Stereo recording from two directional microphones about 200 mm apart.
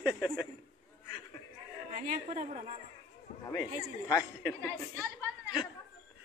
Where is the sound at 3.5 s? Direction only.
20° left (ahead or behind).